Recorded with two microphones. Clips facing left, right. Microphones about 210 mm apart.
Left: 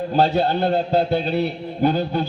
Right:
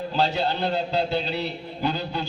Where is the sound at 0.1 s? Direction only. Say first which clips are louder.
Left 6 dB; 55° left (ahead or behind).